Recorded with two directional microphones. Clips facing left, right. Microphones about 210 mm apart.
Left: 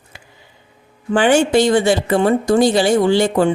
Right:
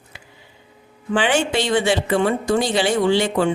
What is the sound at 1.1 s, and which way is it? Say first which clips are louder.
A woman's voice: left 6 dB; 45° left (ahead or behind).